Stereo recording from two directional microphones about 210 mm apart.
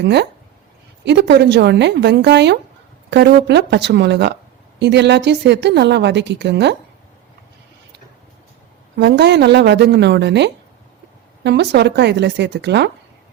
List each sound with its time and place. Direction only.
1.0 s a woman's voice: 55° right (ahead or behind)
9.0 s a woman's voice: 50° right (ahead or behind)